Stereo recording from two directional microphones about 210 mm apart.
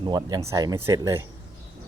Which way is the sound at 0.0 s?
20° right (ahead or behind).